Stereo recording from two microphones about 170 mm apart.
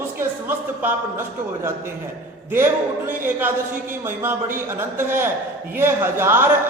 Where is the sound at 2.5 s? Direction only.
15° right (ahead or behind).